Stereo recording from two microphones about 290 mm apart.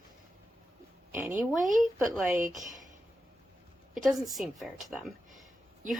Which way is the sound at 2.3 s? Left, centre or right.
Right.